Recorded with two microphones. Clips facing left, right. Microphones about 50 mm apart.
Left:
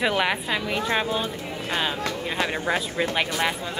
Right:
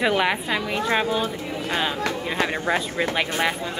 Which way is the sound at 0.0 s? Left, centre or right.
Centre.